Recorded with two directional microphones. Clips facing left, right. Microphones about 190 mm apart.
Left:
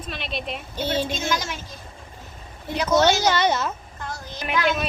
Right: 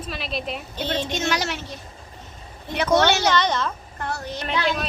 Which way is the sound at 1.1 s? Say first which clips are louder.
Right 2 dB; 70° right (ahead or behind).